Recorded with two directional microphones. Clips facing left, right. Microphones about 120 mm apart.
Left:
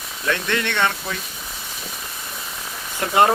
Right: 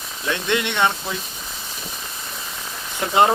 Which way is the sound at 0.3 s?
20° right (ahead or behind).